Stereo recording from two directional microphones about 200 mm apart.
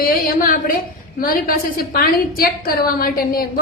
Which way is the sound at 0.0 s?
45° left (ahead or behind).